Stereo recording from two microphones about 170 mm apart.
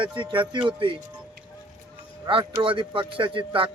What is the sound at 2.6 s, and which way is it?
Speech, 30° right (ahead or behind).